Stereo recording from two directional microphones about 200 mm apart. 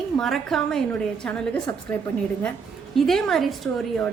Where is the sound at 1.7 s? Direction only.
15° left (ahead or behind).